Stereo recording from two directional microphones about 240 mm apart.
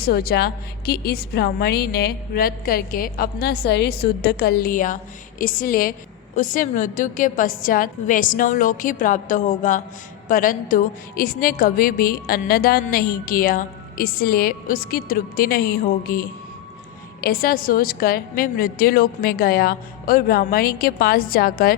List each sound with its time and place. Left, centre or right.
0.0 s a woman's voice: left